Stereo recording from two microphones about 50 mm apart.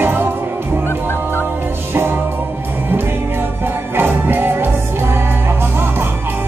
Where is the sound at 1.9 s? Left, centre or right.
Right.